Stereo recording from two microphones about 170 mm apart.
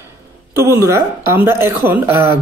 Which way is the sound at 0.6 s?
15° right (ahead or behind).